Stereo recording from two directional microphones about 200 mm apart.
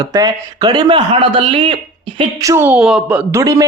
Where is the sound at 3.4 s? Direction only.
20° right (ahead or behind).